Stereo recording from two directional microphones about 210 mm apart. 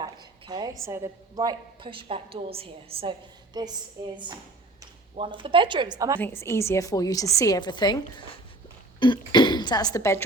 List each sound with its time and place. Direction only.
0.0 s a sound: 20° right (ahead or behind)
0.9 s a woman's voice: 15° right (ahead or behind)
4.8 s a woman's voice: 25° right (ahead or behind)
6.1 s a woman's voice: 10° left (ahead or behind)